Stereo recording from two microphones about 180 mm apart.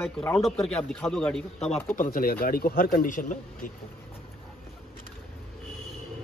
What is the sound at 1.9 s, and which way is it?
A man's voice, 50° left (ahead or behind).